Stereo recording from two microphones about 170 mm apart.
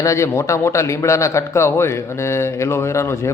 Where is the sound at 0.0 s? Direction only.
15° left (ahead or behind).